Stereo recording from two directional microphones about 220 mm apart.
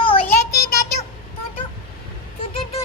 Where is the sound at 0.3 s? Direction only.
45° left (ahead or behind).